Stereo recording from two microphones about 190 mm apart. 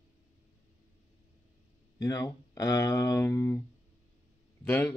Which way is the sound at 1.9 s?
20° left (ahead or behind).